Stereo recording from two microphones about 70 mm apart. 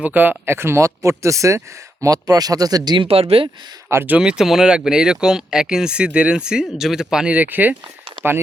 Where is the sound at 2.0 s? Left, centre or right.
Right.